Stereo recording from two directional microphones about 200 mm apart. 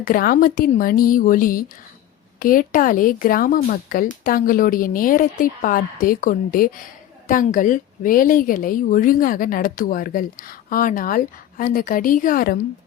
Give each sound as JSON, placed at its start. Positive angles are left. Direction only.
{"t": 0.0, "sound": "speech", "side_deg": 45}